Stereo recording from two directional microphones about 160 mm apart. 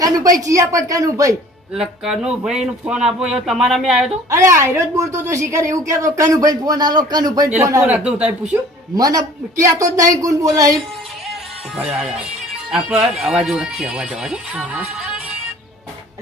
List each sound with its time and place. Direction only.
0.0 s speech: 20° right (ahead or behind)
1.7 s speech: 5° right (ahead or behind)
4.3 s speech: 20° right (ahead or behind)
9.0 s speech: 25° right (ahead or behind)
11.3 s music: 5° right (ahead or behind)
12.7 s speech: 5° right (ahead or behind)